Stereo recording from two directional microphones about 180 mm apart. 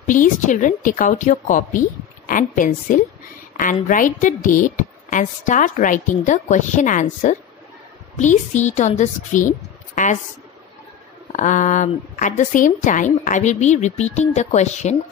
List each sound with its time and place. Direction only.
0.0 s a woman's voice: 45° left (ahead or behind)
11.3 s a woman's voice: 45° left (ahead or behind)